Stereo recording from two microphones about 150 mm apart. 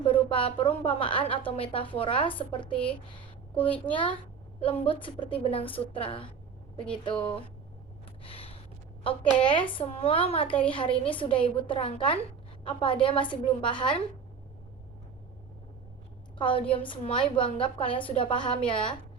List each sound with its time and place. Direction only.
0.3 s a woman's voice: 35° left (ahead or behind)
8.2 s gasp: 40° left (ahead or behind)
9.0 s a woman's voice: 35° left (ahead or behind)
16.4 s a woman's voice: 35° left (ahead or behind)